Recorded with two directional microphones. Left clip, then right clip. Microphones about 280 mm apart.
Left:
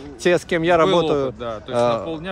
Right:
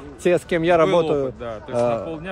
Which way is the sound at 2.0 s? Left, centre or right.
Left.